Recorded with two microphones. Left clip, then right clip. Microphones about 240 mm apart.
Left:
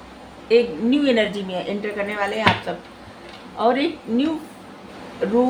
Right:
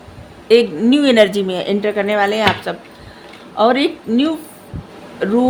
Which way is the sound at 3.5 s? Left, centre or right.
Right.